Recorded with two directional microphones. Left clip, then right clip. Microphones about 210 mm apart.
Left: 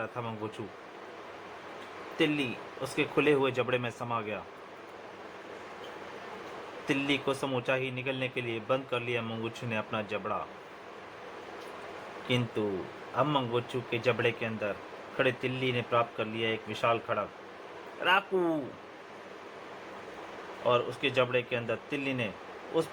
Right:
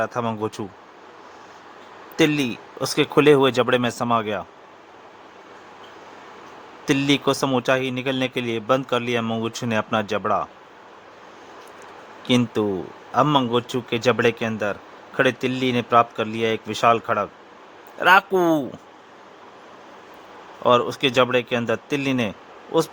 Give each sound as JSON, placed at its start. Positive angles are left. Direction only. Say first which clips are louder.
{"t": 0.0, "sound": "speech", "louder": "right 13 dB", "side_deg": -55}
{"t": 2.1, "sound": "speech", "louder": "right 10 dB", "side_deg": -55}
{"t": 6.8, "sound": "speech", "louder": "right 10 dB", "side_deg": -55}
{"t": 12.3, "sound": "speech", "louder": "right 10 dB", "side_deg": -55}
{"t": 20.7, "sound": "speech", "louder": "right 10 dB", "side_deg": -55}